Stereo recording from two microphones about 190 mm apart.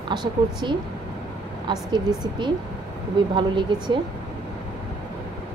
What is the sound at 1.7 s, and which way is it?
Speech, 25° right (ahead or behind).